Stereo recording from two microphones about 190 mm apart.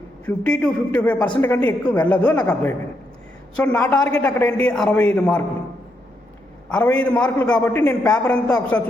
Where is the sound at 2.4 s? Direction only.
20° left (ahead or behind).